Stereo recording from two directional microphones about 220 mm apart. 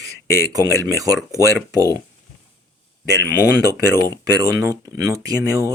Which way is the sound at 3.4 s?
50° left (ahead or behind).